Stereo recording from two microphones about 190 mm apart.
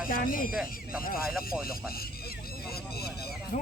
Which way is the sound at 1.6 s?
50° left (ahead or behind).